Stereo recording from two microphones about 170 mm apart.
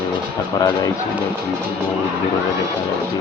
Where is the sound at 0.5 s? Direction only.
20° left (ahead or behind).